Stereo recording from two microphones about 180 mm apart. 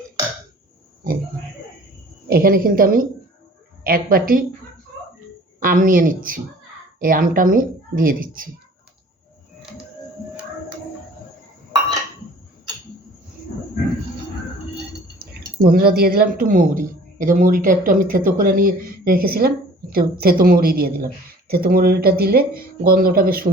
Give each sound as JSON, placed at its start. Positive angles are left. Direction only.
{"t": 2.3, "sound": "speech", "side_deg": -55}
{"t": 5.5, "sound": "speech", "side_deg": -50}
{"t": 15.2, "sound": "a woman's voice", "side_deg": -55}